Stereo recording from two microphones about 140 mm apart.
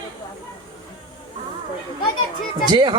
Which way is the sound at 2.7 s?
35° right (ahead or behind).